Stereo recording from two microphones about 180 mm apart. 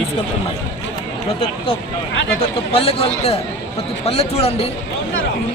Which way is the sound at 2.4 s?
30° left (ahead or behind).